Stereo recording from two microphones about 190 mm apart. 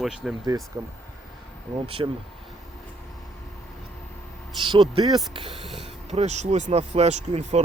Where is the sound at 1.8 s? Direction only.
30° right (ahead or behind).